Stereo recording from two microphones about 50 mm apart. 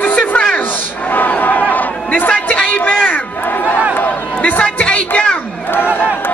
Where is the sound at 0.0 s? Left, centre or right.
Left.